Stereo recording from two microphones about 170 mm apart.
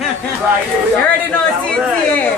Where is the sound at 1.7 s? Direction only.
10° left (ahead or behind).